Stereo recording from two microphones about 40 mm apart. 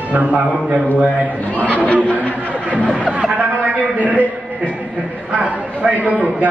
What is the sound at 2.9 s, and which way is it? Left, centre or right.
Chatter, right.